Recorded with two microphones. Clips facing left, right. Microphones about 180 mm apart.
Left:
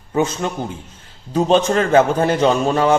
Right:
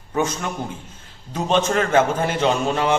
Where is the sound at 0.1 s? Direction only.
30° left (ahead or behind).